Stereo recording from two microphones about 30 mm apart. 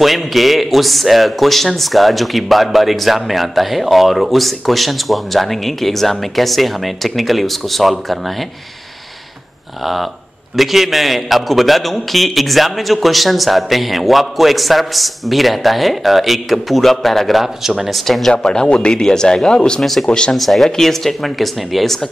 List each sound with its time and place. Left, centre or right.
0.0 s a man's voice: centre
10.6 s a man's voice: centre
18.4 s speech: left
19.8 s speech: centre
20.1 s speech: left
20.3 s a man's voice: centre